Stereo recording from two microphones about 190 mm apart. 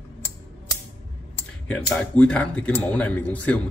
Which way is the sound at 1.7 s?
5° left (ahead or behind).